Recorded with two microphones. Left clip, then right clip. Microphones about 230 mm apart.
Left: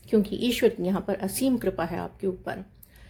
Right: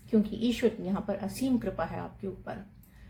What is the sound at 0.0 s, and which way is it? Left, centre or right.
Speech, left.